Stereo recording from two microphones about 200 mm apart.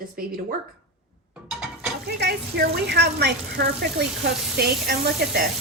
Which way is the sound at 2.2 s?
55° right (ahead or behind).